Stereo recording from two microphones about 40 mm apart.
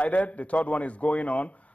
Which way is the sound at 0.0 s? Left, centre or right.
Left.